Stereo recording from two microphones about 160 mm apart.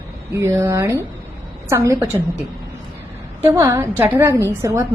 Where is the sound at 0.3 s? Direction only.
15° right (ahead or behind).